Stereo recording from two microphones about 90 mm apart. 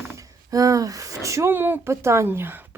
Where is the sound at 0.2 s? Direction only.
40° right (ahead or behind).